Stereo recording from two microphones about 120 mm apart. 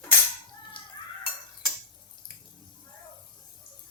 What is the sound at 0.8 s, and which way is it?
Stir, 45° left (ahead or behind).